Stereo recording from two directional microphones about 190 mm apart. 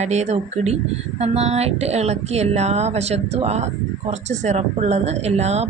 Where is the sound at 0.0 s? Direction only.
35° right (ahead or behind).